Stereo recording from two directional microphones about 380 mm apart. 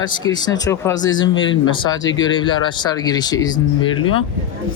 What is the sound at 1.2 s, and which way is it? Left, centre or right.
Speech, left.